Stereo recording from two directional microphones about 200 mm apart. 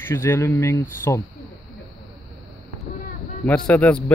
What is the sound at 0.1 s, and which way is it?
Speech, 10° left (ahead or behind).